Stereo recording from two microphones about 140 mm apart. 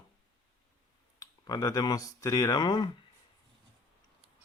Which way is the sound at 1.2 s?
25° left (ahead or behind).